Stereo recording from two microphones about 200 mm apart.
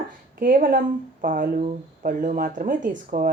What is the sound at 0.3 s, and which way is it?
Speech, 45° right (ahead or behind).